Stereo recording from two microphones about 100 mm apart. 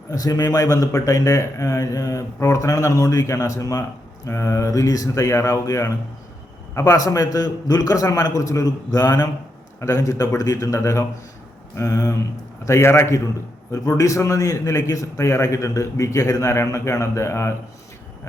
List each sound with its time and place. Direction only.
0.1 s a man's voice: 35° left (ahead or behind)